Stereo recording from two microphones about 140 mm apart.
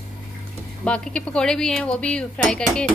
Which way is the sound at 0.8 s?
5° left (ahead or behind).